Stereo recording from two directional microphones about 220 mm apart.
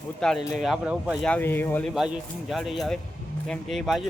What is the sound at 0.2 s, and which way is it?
Speech, centre (ahead or behind).